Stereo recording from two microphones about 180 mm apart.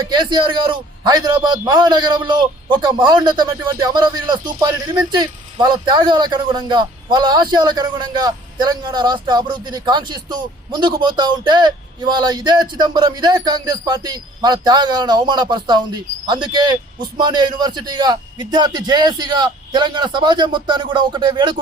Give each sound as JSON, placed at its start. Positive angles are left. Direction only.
{"t": 0.2, "sound": "a man's voice", "side_deg": -25}